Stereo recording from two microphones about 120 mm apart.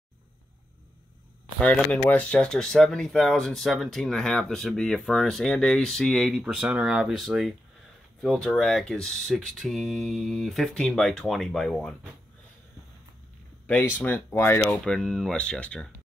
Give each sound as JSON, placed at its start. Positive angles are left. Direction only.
{"t": 1.6, "sound": "speech", "side_deg": 15}
{"t": 13.7, "sound": "speech", "side_deg": 15}
{"t": 14.8, "sound": "speech", "side_deg": 5}